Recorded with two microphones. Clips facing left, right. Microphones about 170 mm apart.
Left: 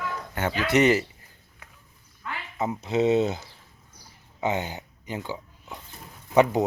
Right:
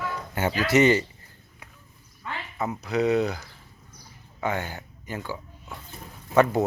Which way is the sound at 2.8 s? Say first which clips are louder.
Left 1 dB; 25° left (ahead or behind).